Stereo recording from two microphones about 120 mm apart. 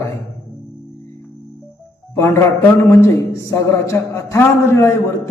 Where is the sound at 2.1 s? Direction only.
20° left (ahead or behind).